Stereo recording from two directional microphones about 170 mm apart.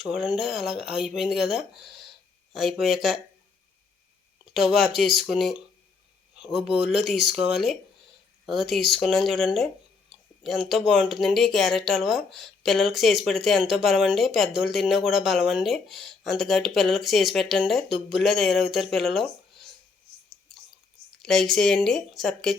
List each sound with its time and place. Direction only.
0.0 s speech: centre (ahead or behind)
4.5 s speech: centre (ahead or behind)
6.7 s speech: centre (ahead or behind)
21.2 s speech: 5° left (ahead or behind)